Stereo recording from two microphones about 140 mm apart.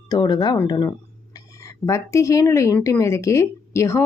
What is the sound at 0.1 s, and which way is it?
Speech, 30° left (ahead or behind).